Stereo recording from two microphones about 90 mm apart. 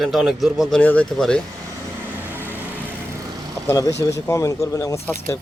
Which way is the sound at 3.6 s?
40° left (ahead or behind).